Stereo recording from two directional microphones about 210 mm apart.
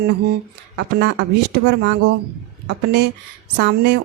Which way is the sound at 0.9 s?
55° right (ahead or behind).